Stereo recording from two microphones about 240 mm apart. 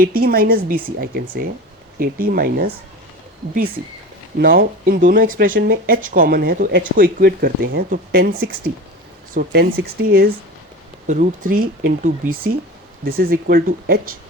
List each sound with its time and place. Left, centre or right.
0.0 s speech: right
4.4 s speech: right